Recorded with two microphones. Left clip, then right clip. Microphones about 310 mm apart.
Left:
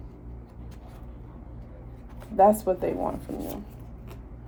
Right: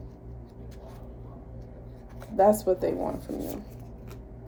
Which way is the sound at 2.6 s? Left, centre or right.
Centre.